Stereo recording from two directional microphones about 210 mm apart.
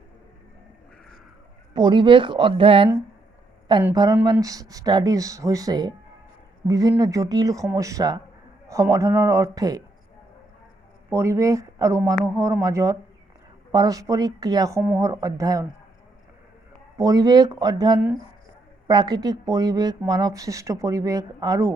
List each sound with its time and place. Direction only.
1.7 s speech: 20° right (ahead or behind)
3.9 s speech: 15° right (ahead or behind)
11.1 s speech: 15° right (ahead or behind)
17.0 s speech: 15° right (ahead or behind)